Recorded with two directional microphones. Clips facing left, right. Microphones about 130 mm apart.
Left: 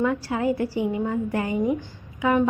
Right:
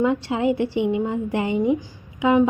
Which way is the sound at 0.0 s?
20° right (ahead or behind).